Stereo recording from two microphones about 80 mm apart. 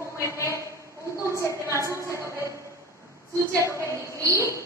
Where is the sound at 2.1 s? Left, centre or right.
Right.